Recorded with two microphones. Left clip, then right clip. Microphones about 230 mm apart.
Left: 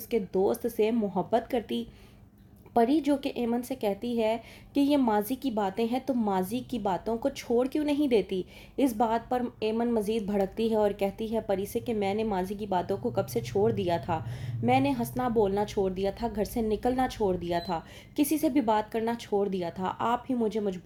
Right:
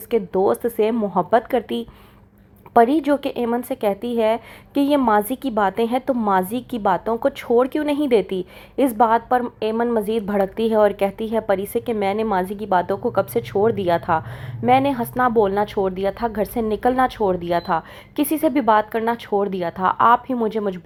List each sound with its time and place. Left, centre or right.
0.1 s a woman's voice: centre
1.3 s a woman's voice: centre